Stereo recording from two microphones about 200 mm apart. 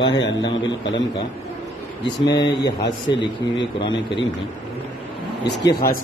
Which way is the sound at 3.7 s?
25° left (ahead or behind).